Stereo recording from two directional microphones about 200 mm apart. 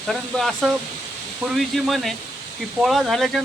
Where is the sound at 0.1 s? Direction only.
Centre (ahead or behind).